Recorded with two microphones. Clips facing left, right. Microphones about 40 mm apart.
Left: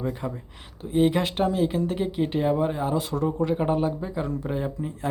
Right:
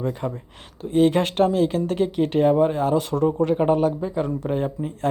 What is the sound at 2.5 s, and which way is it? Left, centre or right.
Speech, right.